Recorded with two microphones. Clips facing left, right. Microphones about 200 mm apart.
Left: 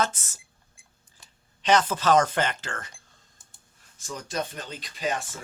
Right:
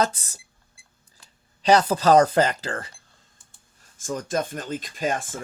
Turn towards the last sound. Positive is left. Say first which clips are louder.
# right 3 dB
turn(degrees=-50)  # may be behind; listen again after turning